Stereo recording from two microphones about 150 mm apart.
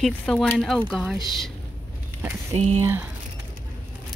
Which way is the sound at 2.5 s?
40° right (ahead or behind).